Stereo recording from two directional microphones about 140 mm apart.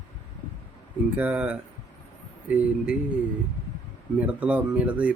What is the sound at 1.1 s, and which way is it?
Speech, 10° right (ahead or behind).